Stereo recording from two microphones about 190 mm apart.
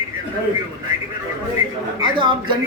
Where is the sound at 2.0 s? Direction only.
25° right (ahead or behind).